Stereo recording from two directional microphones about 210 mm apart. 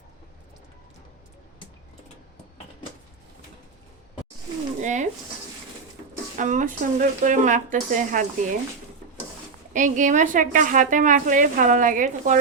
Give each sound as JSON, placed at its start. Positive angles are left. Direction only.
{"t": 4.8, "sound": "a sound", "side_deg": -35}
{"t": 6.3, "sound": "a woman's voice", "side_deg": -35}
{"t": 9.7, "sound": "a woman's voice", "side_deg": -35}